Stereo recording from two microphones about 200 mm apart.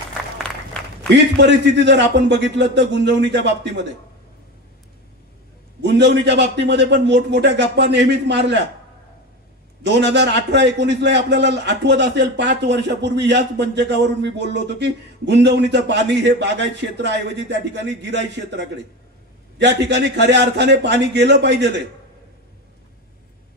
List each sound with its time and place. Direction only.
1.1 s a man's voice: 60° right (ahead or behind)
5.8 s a man's voice: 60° right (ahead or behind)
9.8 s a man's voice: 60° right (ahead or behind)
19.9 s a man's voice: 60° right (ahead or behind)